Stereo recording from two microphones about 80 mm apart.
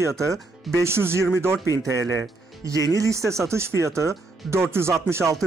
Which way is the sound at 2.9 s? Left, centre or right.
Right.